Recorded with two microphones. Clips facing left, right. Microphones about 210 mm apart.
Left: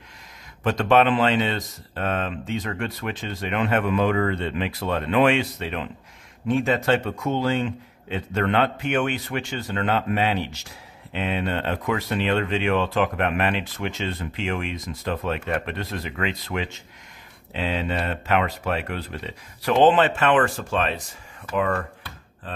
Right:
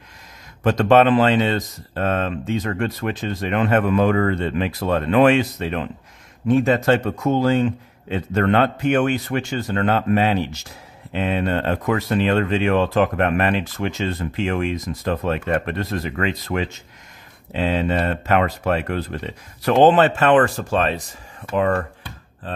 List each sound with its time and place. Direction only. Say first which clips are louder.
0.7 s speech: right 4 dB; 40° right (ahead or behind)